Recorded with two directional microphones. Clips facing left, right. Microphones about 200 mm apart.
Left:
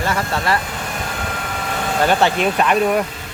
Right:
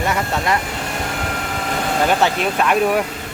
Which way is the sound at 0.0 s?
20° right (ahead or behind).